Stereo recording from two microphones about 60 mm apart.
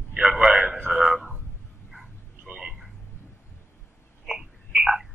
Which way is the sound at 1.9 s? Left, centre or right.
Centre.